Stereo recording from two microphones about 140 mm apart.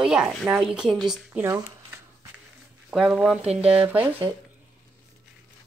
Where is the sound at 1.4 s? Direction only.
20° right (ahead or behind).